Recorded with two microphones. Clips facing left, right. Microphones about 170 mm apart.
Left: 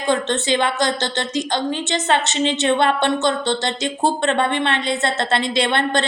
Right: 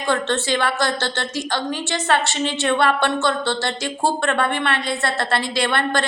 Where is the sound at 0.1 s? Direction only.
20° left (ahead or behind).